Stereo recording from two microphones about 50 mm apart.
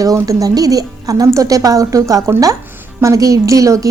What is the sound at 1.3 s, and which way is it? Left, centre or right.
A woman's voice, right.